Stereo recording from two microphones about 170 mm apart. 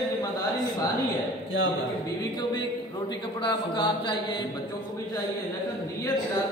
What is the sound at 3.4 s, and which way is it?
Speech, 25° left (ahead or behind).